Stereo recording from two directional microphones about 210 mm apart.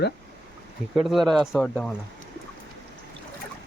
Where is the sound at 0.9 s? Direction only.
Centre (ahead or behind).